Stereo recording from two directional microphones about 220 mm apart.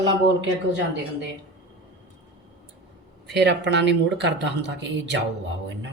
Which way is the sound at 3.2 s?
50° right (ahead or behind).